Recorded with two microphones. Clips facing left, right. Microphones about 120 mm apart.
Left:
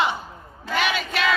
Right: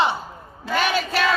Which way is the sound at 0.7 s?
40° right (ahead or behind).